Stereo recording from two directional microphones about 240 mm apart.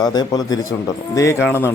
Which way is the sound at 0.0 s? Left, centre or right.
Centre.